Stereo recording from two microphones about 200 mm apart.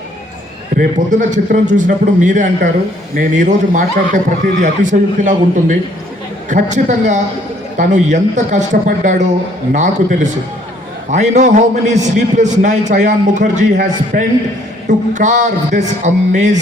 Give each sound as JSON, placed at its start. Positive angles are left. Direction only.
{"t": 0.8, "sound": "a man's voice", "side_deg": -40}